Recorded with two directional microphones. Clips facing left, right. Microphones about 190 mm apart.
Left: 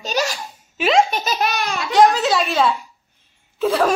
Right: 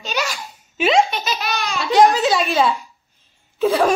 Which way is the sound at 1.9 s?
Centre (ahead or behind).